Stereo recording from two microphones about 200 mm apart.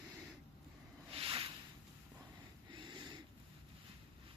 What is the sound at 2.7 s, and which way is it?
Snort, 25° right (ahead or behind).